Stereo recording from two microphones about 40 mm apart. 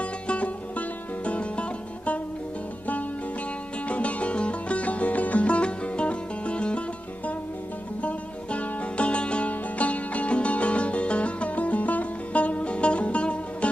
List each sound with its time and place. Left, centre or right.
0.0 s music: left
3.8 s music: left
8.0 s music: left